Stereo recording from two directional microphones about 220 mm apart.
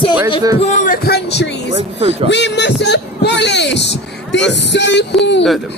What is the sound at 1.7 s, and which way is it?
Speech, 25° right (ahead or behind).